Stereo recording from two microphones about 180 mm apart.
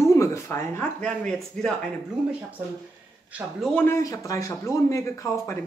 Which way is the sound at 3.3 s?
Centre (ahead or behind).